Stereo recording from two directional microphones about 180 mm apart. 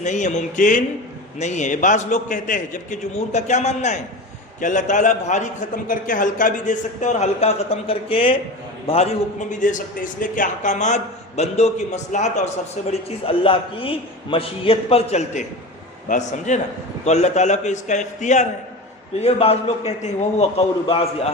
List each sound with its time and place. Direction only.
0.0 s a man's voice: 40° left (ahead or behind)